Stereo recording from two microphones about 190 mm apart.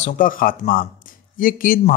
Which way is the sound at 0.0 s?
45° left (ahead or behind).